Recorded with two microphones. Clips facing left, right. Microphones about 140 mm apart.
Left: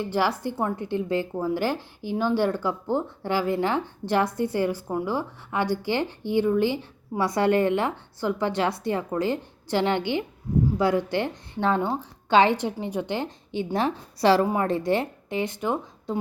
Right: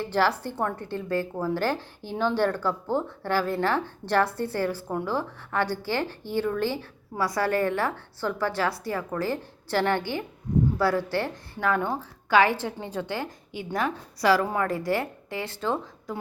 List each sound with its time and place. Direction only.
0.0 s a woman's voice: 15° left (ahead or behind)